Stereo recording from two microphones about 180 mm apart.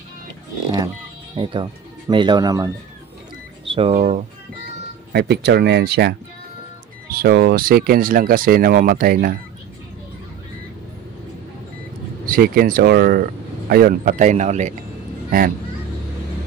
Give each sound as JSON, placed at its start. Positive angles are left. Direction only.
{"t": 1.3, "sound": "speech", "side_deg": -25}
{"t": 3.6, "sound": "speech", "side_deg": -30}
{"t": 5.1, "sound": "speech", "side_deg": -65}
{"t": 12.3, "sound": "speech", "side_deg": -55}